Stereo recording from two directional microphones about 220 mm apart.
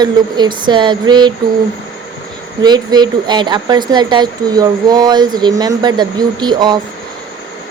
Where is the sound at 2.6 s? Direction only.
20° right (ahead or behind).